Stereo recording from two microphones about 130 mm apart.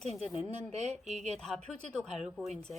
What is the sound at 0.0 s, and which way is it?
Speech, 55° right (ahead or behind).